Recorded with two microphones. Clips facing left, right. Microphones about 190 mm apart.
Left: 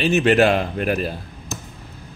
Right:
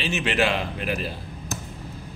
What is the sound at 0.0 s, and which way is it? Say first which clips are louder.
Speech: left 8 dB; 45° left (ahead or behind).